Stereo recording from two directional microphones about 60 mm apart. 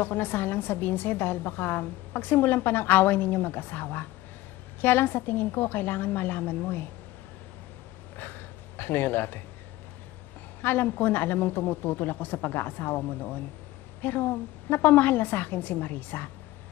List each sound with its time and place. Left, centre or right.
0.0 s a woman's voice: left
8.2 s a sound: left
10.6 s a woman's voice: left